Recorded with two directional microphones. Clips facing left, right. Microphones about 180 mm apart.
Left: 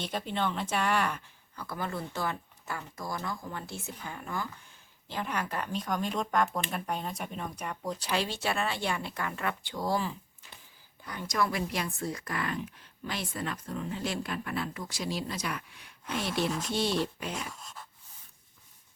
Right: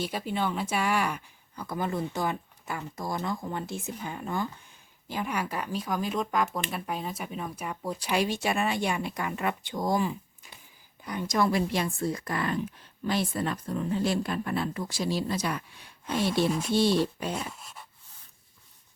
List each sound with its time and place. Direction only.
0.0 s speech: 10° right (ahead or behind); by 4.4 s 25° right (ahead or behind)
5.0 s speech: 10° right (ahead or behind); by 16.5 s 30° right (ahead or behind)
16.5 s speech: 10° right (ahead or behind)
16.9 s speech: 35° right (ahead or behind)
17.3 s speech: 10° right (ahead or behind)